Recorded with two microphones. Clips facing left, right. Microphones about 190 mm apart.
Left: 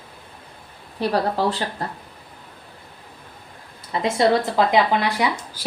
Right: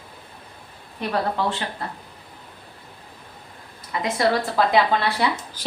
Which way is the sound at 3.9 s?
25° left (ahead or behind).